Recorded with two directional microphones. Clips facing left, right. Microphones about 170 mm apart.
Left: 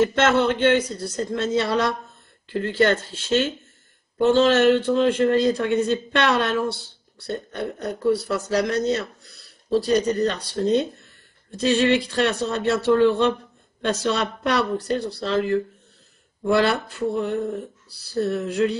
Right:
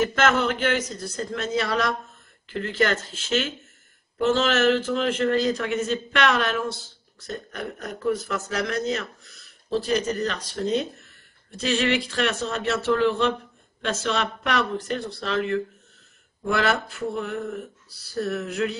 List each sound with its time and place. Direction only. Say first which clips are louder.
0.0 s a man's voice: left 3 dB; 30° left (ahead or behind)